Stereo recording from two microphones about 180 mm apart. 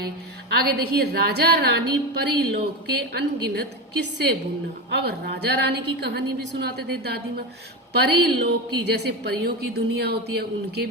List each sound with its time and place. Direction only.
0.5 s a woman's voice: 60° right (ahead or behind)